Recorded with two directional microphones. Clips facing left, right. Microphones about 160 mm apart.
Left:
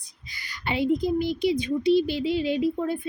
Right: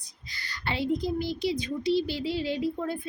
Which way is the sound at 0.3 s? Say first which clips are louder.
Left 4 dB; 15° left (ahead or behind).